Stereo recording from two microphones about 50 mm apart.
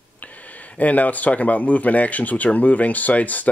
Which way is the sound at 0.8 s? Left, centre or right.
Left.